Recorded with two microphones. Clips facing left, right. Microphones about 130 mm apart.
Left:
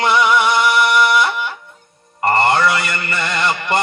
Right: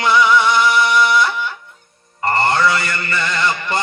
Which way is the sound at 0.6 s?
60° left (ahead or behind).